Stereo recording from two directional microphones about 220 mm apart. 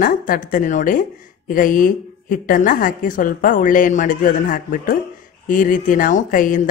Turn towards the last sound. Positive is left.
turn(degrees=35)  # may be behind; listen again after turning